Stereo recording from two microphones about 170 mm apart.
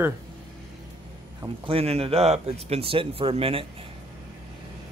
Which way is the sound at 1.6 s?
35° right (ahead or behind).